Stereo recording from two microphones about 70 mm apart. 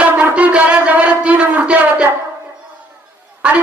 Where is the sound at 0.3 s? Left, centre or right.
Centre.